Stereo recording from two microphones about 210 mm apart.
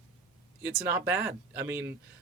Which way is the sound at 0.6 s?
10° right (ahead or behind).